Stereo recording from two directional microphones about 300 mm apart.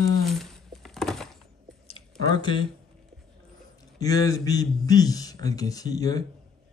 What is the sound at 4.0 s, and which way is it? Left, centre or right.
A man's voice, centre.